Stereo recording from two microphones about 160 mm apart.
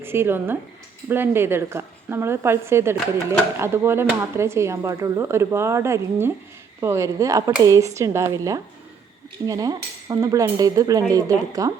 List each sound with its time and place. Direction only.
0.0 s a woman's voice: 15° right (ahead or behind)